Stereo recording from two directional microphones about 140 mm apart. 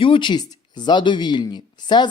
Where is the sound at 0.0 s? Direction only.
35° left (ahead or behind).